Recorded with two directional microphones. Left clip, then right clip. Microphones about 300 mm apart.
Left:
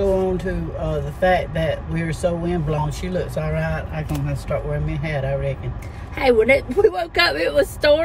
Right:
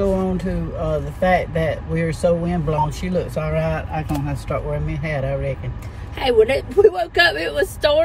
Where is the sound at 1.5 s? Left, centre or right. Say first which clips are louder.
Right 1 dB; centre.